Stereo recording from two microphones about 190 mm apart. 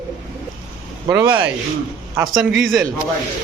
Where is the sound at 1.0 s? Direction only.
10° right (ahead or behind).